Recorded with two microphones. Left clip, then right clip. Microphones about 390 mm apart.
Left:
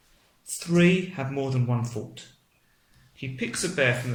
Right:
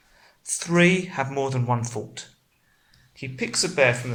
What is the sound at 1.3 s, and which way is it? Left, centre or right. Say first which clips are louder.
Speech: right 3 dB; right.